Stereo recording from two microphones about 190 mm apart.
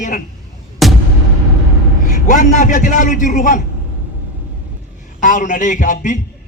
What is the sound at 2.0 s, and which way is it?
A man's voice, 40° left (ahead or behind).